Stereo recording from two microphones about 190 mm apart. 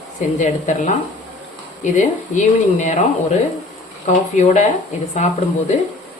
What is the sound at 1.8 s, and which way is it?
Speech, 40° left (ahead or behind).